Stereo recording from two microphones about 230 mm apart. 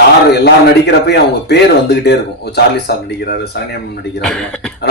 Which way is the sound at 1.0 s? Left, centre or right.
Left.